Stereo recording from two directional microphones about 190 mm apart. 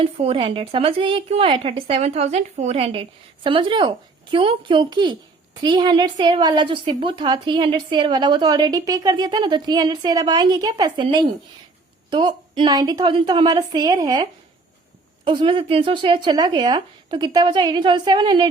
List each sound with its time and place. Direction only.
0.0 s a woman's voice: 30° right (ahead or behind)